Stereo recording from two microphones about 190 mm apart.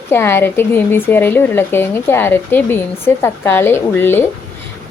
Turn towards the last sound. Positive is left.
turn(degrees=10)  # may be behind; listen again after turning